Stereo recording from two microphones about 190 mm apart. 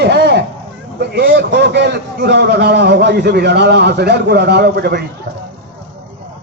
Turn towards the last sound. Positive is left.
turn(degrees=-60)  # may be behind; listen again after turning